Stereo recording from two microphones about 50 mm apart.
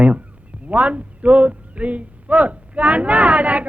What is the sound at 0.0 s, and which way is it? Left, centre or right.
Speech, right.